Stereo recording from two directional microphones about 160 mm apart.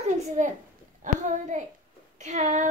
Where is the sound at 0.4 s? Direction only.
50° right (ahead or behind).